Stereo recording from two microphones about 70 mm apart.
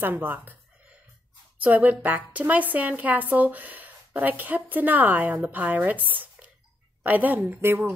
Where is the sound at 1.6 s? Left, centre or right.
Right.